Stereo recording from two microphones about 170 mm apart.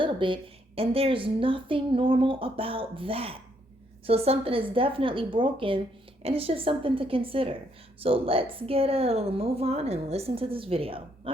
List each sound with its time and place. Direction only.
0.0 s a woman's voice: 30° right (ahead or behind)